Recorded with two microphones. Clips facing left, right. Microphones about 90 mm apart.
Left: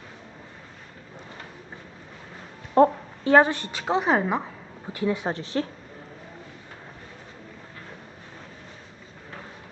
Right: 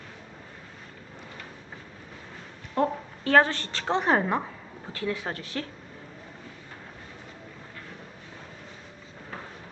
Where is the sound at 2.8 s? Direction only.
35° left (ahead or behind).